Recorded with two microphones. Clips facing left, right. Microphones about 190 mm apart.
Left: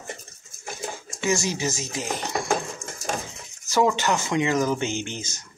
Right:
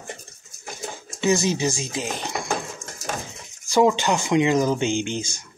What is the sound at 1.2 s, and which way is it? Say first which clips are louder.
Speech: right 4 dB; 20° right (ahead or behind).